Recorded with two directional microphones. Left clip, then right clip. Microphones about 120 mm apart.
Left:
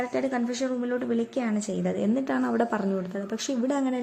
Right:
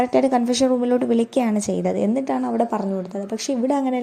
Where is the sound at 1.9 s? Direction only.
25° right (ahead or behind).